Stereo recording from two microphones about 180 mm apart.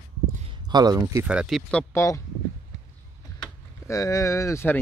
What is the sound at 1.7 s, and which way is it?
Speech, 10° left (ahead or behind).